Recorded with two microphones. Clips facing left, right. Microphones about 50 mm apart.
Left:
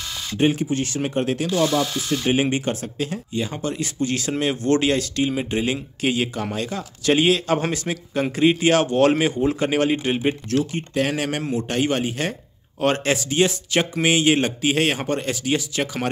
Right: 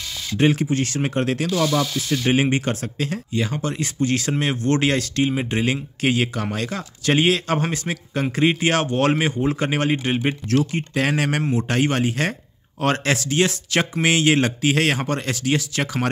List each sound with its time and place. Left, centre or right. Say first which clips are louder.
0.4 s speech: right 1 dB; right
7.1 s speech: left 1 dB; right
10.5 s speech: right 1 dB; right